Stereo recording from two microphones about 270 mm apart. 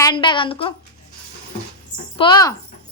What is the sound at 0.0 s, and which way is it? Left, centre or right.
Speech, centre.